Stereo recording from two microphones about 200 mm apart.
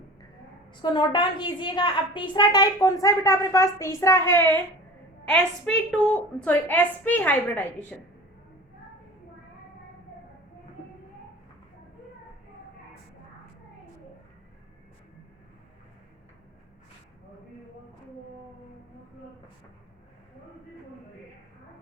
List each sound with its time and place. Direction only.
0.8 s a woman's voice: 20° left (ahead or behind)